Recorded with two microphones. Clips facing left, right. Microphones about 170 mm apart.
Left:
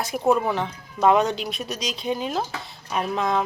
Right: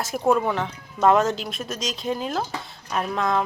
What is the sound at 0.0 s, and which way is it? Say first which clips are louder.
Speech: even; centre (ahead or behind).